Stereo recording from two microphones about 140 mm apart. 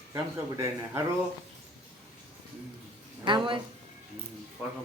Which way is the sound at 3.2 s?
35° right (ahead or behind).